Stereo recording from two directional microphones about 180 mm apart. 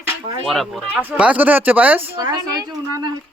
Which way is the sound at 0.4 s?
Centre (ahead or behind).